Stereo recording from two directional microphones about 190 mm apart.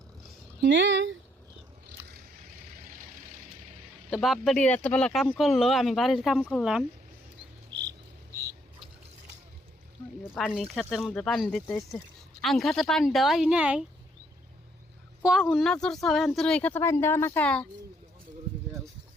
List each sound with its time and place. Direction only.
0.6 s speech: 70° right (ahead or behind)
1.9 s vehicle: 50° right (ahead or behind)
4.1 s speech: centre (ahead or behind)
10.3 s speech: centre (ahead or behind)
15.2 s speech: 5° right (ahead or behind)